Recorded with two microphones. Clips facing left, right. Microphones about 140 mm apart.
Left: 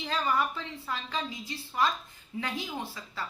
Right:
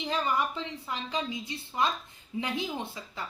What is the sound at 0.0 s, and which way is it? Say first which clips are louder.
A woman's voice: even; 15° right (ahead or behind).